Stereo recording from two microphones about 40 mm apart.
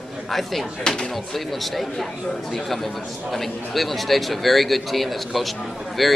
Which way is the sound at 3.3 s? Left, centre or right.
Centre.